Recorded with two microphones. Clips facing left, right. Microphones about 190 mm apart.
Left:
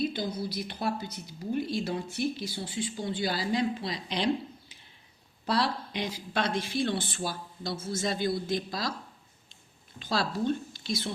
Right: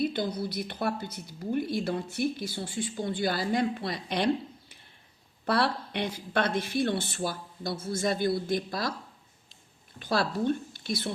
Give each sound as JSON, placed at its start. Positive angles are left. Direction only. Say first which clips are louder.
{"t": 0.0, "sound": "a woman's voice", "louder": "right 2 dB", "side_deg": -55}
{"t": 5.5, "sound": "speech", "louder": "right 2 dB", "side_deg": -60}
{"t": 10.0, "sound": "speech", "louder": "right 2 dB", "side_deg": -55}